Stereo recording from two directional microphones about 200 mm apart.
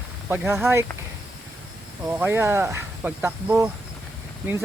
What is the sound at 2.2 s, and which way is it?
Speech, 10° right (ahead or behind).